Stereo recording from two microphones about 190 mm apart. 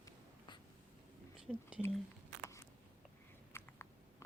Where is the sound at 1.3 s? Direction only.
5° right (ahead or behind).